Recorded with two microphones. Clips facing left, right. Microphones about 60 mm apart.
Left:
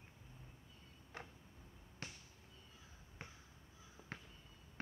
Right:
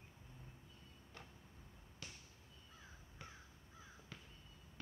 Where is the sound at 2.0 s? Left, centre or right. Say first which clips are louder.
Left 4 dB; left.